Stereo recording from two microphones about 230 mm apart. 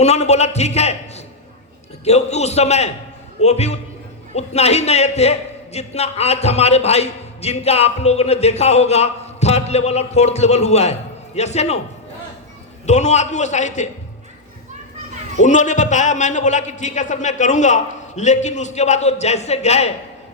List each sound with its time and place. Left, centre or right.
0.0 s a man's voice: left
12.8 s a man's voice: left
15.4 s a man's voice: left